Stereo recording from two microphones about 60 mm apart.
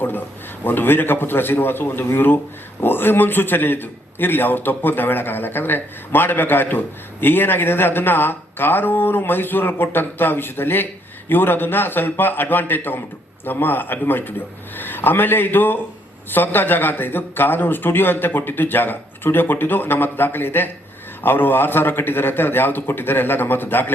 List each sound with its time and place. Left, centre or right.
0.0 s a man's voice: left